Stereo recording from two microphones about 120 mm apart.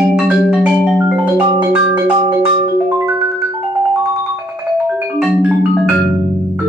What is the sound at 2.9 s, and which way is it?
Music, 20° right (ahead or behind).